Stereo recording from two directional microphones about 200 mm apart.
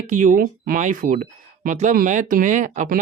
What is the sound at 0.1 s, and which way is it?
Speech, 40° right (ahead or behind).